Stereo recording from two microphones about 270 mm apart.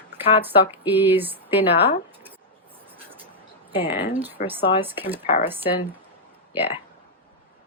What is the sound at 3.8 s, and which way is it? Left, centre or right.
A woman's voice, centre.